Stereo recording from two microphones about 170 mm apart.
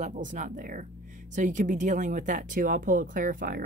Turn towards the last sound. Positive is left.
turn(degrees=-55)  # may be behind; listen again after turning